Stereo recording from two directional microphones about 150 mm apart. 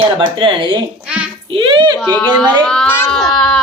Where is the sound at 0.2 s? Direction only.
30° right (ahead or behind).